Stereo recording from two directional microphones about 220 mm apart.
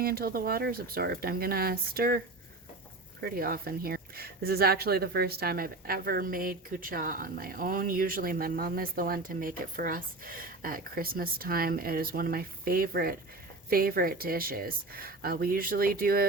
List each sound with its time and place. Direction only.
0.0 s speech: 45° right (ahead or behind)